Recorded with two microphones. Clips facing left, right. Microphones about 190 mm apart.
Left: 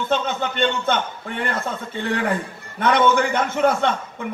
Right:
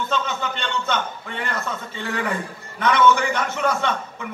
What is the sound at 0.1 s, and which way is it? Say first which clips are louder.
Speech: left 3 dB; 50° left (ahead or behind).